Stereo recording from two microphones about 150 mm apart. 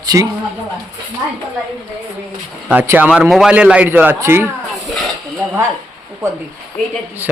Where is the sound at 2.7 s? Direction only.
10° right (ahead or behind).